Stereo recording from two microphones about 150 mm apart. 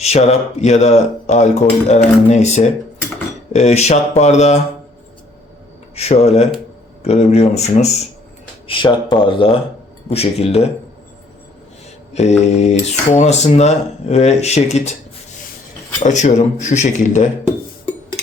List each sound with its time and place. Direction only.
0.0 s speech: 45° left (ahead or behind)
6.0 s speech: 45° left (ahead or behind)
8.6 s speech: 35° left (ahead or behind)
12.4 s speech: 50° left (ahead or behind)
16.0 s speech: 55° left (ahead or behind)